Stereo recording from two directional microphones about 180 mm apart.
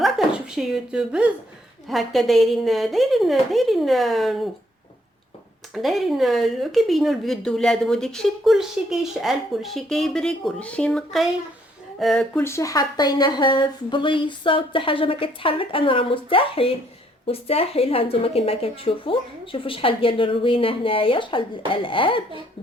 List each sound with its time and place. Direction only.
0.0 s a sound: centre (ahead or behind)
1.9 s speech: centre (ahead or behind)
5.7 s a woman's voice: centre (ahead or behind); by 22.2 s 30° left (ahead or behind)